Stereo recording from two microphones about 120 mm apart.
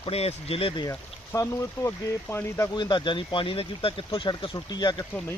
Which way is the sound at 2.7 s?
40° left (ahead or behind).